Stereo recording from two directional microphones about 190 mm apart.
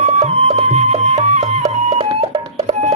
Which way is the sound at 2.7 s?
35° right (ahead or behind).